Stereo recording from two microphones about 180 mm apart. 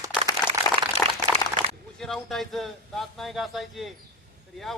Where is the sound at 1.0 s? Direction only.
15° left (ahead or behind).